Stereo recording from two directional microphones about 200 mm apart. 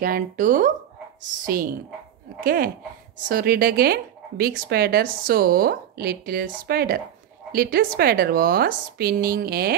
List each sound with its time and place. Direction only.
0.0 s speech: 45° right (ahead or behind)